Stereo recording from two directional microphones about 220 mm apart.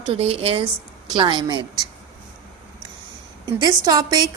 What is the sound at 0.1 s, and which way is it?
A woman's voice, 25° right (ahead or behind).